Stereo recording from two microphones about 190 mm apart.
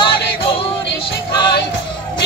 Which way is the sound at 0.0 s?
25° left (ahead or behind).